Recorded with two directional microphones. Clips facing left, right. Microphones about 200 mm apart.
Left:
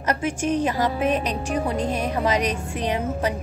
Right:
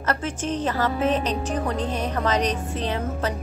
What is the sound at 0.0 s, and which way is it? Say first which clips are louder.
A woman's voice: left 3 dB; 15° left (ahead or behind).